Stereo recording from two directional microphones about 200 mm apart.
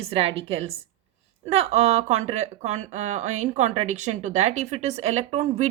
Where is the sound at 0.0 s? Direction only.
30° right (ahead or behind).